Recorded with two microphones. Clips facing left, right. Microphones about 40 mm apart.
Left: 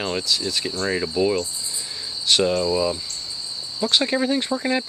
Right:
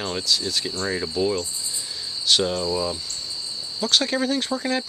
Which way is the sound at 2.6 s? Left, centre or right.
Centre.